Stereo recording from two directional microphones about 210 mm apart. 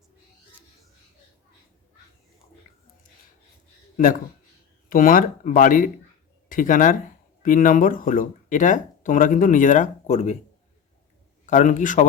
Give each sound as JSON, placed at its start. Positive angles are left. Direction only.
{"t": 3.9, "sound": "speech", "side_deg": 40}
{"t": 11.4, "sound": "speech", "side_deg": 35}